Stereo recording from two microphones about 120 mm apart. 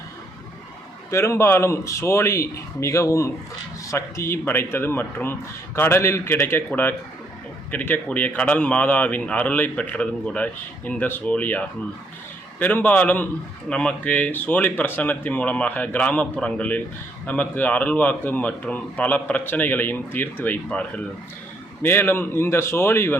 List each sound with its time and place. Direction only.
1.1 s a man's voice: 25° left (ahead or behind)